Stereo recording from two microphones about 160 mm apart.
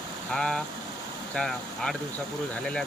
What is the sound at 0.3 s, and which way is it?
Speech, 5° left (ahead or behind).